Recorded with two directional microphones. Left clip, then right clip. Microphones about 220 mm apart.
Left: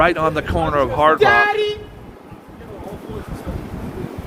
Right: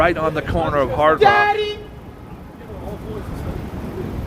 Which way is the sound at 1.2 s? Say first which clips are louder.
Even; 60° left (ahead or behind).